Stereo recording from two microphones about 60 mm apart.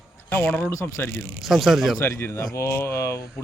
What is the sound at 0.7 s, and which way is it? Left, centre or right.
Speech, left.